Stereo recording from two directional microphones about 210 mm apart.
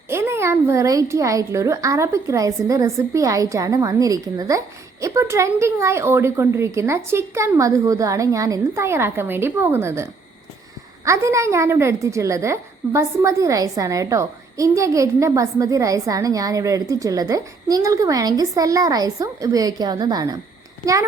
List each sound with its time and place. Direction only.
0.1 s a child's voice: 10° right (ahead or behind)